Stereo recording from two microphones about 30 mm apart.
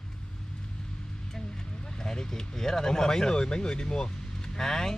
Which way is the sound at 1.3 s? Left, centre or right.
Centre.